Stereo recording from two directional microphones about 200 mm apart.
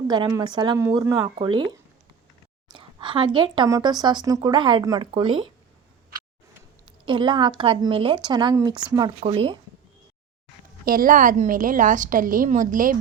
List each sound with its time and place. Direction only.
0.1 s a woman's voice: 20° right (ahead or behind)
6.8 s a woman's voice: 25° right (ahead or behind)
10.8 s a woman's voice: 45° right (ahead or behind)